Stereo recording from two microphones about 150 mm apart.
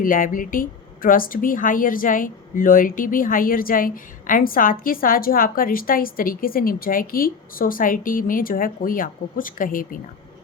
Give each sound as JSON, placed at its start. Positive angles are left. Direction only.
{"t": 0.0, "sound": "a woman's voice", "side_deg": 65}